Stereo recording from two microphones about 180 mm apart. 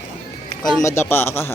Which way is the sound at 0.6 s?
15° left (ahead or behind).